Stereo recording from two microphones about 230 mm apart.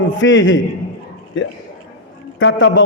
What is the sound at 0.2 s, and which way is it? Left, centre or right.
A man's voice, left.